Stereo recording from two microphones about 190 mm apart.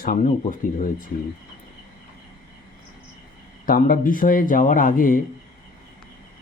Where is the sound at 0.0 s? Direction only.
50° left (ahead or behind).